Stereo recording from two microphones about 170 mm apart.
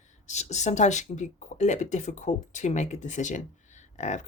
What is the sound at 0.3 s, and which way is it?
Speech, 40° left (ahead or behind).